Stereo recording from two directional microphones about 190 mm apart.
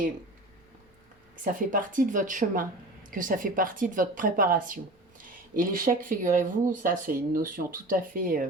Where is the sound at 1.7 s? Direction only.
45° right (ahead or behind).